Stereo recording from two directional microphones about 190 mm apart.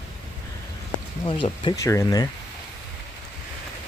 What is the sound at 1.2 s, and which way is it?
Speech, 25° left (ahead or behind).